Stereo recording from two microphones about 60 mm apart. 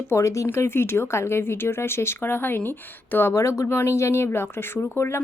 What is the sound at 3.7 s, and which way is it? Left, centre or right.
Speech, left.